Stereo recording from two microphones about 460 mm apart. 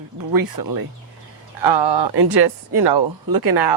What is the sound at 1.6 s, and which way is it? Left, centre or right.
Speech, right.